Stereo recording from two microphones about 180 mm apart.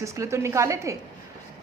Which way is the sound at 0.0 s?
15° right (ahead or behind).